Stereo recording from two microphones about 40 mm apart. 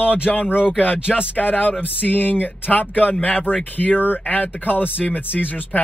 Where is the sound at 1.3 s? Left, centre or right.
Left.